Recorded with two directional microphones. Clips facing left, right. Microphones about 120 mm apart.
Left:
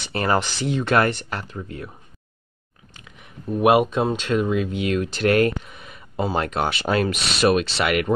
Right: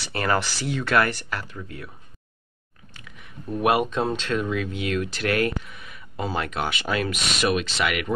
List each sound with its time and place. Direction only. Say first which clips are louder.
0.0 s speech: left 3 dB; 25° left (ahead or behind)
3.6 s speech: left 5 dB; 15° left (ahead or behind); by 8.1 s 35° left (ahead or behind)